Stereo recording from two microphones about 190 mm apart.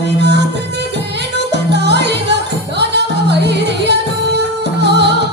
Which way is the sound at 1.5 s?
60° right (ahead or behind).